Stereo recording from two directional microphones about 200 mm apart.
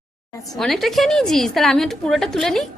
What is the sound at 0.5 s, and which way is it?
A woman's voice, centre (ahead or behind).